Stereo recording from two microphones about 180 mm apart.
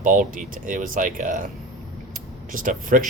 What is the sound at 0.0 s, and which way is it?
Speech, 45° right (ahead or behind).